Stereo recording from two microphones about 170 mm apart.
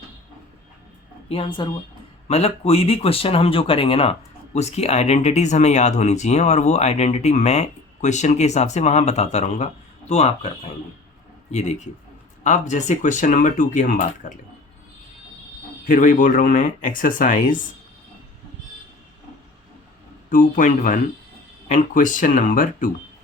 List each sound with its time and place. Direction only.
1.3 s speech: 30° left (ahead or behind)
12.4 s speech: 45° left (ahead or behind)
15.9 s speech: 50° left (ahead or behind)
20.3 s speech: 50° left (ahead or behind)